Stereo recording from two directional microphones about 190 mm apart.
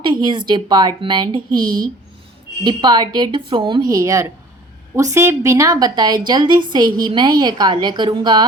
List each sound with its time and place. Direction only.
0.0 s a woman's voice: 25° right (ahead or behind)